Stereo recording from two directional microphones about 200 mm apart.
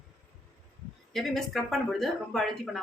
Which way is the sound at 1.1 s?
Centre (ahead or behind).